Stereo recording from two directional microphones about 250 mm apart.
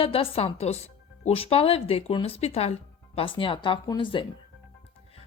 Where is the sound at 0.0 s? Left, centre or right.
Left.